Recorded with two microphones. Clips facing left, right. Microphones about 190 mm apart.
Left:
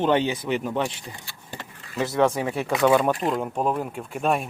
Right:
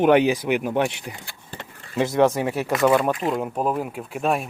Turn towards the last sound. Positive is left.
turn(degrees=0)  # may be behind; listen again after turning